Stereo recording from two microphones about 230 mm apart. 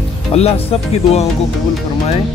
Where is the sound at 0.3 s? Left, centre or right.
Left.